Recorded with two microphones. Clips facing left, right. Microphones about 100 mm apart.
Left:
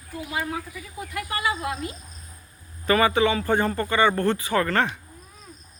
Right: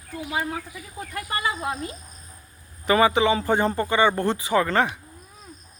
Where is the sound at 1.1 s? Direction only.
30° right (ahead or behind).